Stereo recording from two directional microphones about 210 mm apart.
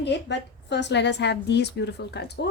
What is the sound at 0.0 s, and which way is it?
A woman's voice, 55° left (ahead or behind).